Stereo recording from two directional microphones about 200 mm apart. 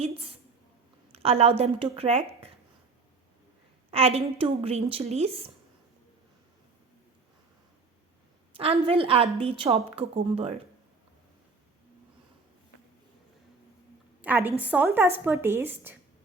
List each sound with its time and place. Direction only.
0.0 s a sound: 30° right (ahead or behind)
1.1 s a woman's voice: 30° right (ahead or behind)
3.9 s a woman's voice: 30° right (ahead or behind)
8.5 s a woman's voice: 30° right (ahead or behind)
14.2 s a woman's voice: 10° right (ahead or behind)